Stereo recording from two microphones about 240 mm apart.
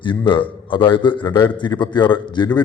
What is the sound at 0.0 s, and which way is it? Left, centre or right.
A man's voice, centre.